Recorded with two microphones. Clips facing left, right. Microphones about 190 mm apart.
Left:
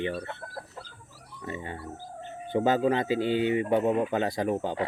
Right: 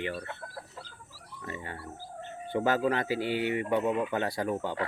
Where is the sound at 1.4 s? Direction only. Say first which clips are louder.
Left 4 dB; 20° left (ahead or behind).